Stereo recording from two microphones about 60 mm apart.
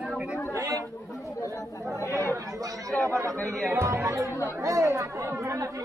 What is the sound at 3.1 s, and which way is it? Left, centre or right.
Speech, right.